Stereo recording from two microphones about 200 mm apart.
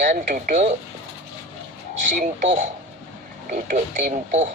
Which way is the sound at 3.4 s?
40° right (ahead or behind).